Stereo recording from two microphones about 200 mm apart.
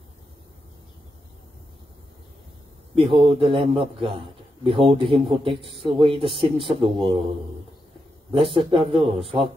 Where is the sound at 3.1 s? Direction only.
25° right (ahead or behind).